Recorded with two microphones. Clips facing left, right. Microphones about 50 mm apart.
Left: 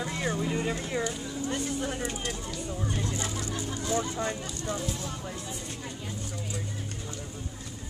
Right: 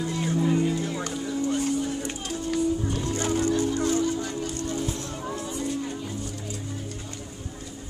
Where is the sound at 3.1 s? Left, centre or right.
Right.